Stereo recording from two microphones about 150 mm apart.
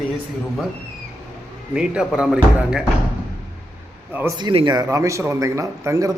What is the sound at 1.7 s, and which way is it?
Speech, 5° right (ahead or behind).